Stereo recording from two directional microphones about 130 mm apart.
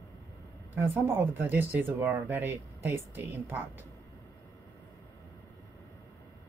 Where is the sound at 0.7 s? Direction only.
15° right (ahead or behind).